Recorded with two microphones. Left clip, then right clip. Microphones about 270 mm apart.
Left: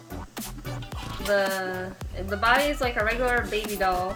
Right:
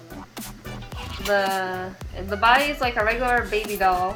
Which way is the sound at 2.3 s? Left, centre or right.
Centre.